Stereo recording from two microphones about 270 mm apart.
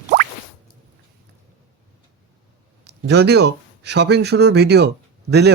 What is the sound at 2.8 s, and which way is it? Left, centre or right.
Speech, right.